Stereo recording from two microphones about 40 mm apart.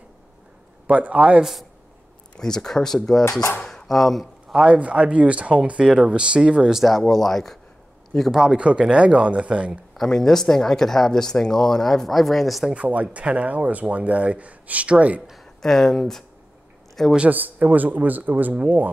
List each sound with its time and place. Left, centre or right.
0.8 s speech: right
1.4 s a man's voice: centre
2.3 s speech: centre
3.3 s speech: left
3.8 s speech: centre
4.6 s speech: right
7.0 s speech: centre
8.3 s speech: centre
8.5 s speech: right
10.0 s speech: centre
12.7 s speech: right
15.6 s a man's voice: centre
17.3 s a man's voice: right